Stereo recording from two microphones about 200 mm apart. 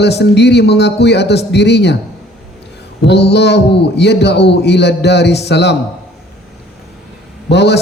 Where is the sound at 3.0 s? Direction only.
55° left (ahead or behind).